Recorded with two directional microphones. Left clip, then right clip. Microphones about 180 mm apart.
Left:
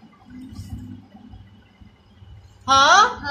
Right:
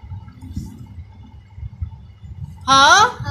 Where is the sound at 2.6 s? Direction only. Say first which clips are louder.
Right 3 dB; 45° right (ahead or behind).